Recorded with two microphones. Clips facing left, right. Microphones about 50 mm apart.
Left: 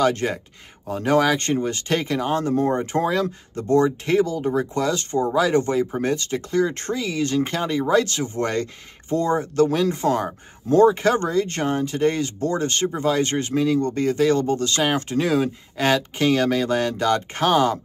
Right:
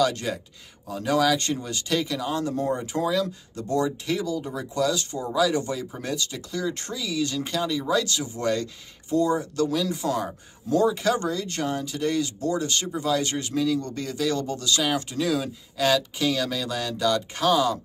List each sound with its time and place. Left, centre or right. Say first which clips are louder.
0.0 s speech: left 4 dB; left